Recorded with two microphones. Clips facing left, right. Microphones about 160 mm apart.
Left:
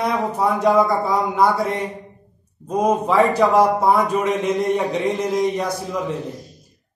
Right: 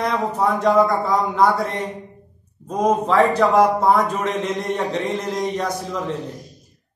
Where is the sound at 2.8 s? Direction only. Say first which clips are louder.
Even; 5° left (ahead or behind).